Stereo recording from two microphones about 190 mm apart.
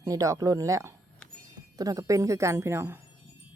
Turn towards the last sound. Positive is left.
turn(degrees=-15)  # may be behind; listen again after turning